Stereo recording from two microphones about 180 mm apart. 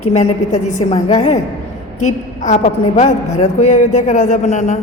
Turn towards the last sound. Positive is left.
turn(degrees=40)  # may be behind; listen again after turning